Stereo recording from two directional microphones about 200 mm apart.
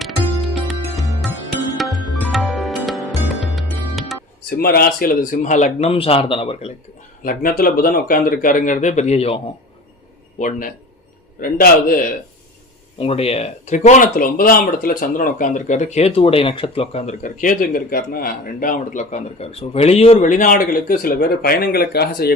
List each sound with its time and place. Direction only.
1.8 s music: centre (ahead or behind)
4.4 s speech: 50° left (ahead or behind); by 6.7 s 30° left (ahead or behind)
7.3 s a man's voice: 45° left (ahead or behind)
13.0 s speech: 30° left (ahead or behind); by 22.4 s 50° left (ahead or behind)